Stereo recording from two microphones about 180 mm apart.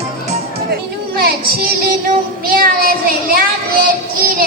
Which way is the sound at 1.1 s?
55° right (ahead or behind).